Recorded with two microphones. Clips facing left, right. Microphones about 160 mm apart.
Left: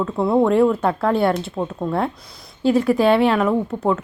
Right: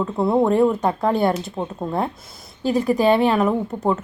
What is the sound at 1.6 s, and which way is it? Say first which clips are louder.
Speech: left 2 dB; 15° right (ahead or behind).